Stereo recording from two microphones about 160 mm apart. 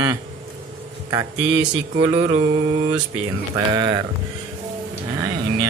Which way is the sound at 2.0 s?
35° right (ahead or behind).